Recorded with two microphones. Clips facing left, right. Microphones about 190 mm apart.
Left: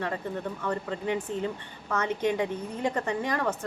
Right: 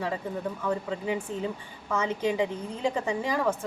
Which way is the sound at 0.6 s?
5° right (ahead or behind).